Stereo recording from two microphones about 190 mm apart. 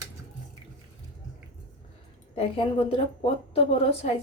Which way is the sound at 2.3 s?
30° left (ahead or behind).